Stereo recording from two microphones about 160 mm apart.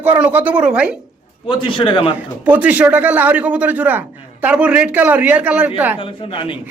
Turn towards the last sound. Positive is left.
turn(degrees=30)  # may be behind; listen again after turning